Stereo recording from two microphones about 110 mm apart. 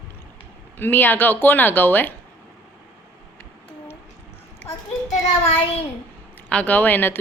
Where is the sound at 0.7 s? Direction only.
20° left (ahead or behind).